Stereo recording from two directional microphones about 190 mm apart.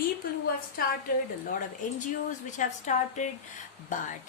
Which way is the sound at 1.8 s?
45° left (ahead or behind).